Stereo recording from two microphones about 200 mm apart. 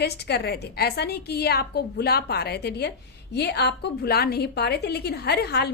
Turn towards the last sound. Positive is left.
turn(degrees=55)  # may be behind; listen again after turning